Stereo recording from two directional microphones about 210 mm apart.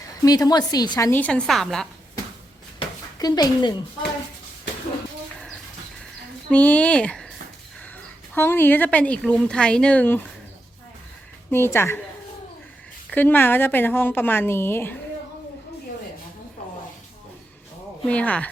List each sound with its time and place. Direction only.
0.3 s speech: 20° left (ahead or behind); by 1.9 s centre (ahead or behind)
2.7 s a sound: 20° left (ahead or behind)
6.5 s speech: 5° left (ahead or behind)
8.4 s speech: 10° left (ahead or behind)
11.5 s speech: 10° left (ahead or behind)
13.1 s speech: 10° left (ahead or behind)
18.1 s speech: 5° left (ahead or behind)